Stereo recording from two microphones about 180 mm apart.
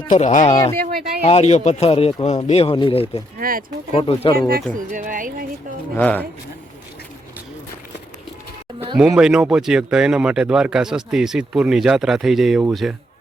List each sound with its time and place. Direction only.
0.1 s speech: 45° left (ahead or behind)
3.3 s speech: 50° right (ahead or behind)
3.9 s speech: 35° left (ahead or behind)
4.4 s speech: 50° right (ahead or behind)
6.0 s speech: 10° left (ahead or behind)
9.0 s speech: 5° right (ahead or behind)